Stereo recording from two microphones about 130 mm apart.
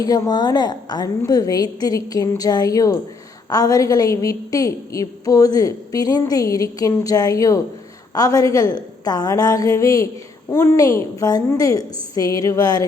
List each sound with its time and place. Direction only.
0.0 s a woman's voice: 30° left (ahead or behind)